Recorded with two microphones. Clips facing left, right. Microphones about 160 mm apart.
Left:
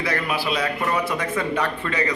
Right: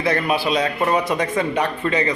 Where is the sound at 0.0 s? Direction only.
25° right (ahead or behind).